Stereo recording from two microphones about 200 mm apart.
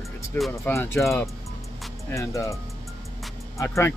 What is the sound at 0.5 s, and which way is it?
Speech, 10° left (ahead or behind).